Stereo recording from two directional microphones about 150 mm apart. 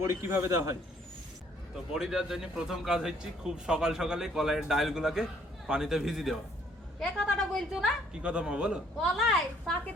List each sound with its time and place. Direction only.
0.0 s a man's voice: 15° right (ahead or behind)
1.9 s speech: 5° right (ahead or behind)